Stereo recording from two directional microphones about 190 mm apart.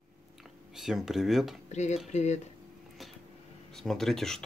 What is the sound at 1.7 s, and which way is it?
Speech, 35° left (ahead or behind).